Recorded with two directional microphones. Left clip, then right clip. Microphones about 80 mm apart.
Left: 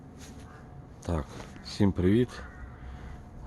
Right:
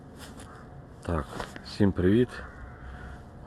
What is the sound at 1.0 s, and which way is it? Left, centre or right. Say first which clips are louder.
Speech: right 3 dB; centre.